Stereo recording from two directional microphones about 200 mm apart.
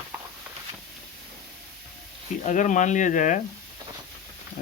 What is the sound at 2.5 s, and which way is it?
Speech, 40° left (ahead or behind).